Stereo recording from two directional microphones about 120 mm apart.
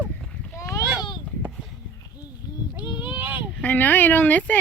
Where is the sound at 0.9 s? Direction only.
40° left (ahead or behind).